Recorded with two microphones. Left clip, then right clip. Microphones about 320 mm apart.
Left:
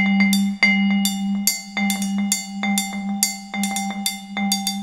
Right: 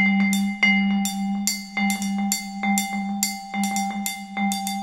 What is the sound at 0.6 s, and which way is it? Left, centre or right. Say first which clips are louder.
Music: left 2 dB; left.